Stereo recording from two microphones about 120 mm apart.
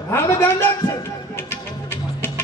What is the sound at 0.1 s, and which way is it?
Speech, 20° left (ahead or behind).